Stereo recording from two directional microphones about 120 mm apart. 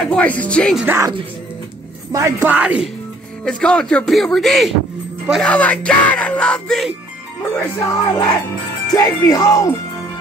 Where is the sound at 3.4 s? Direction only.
5° left (ahead or behind).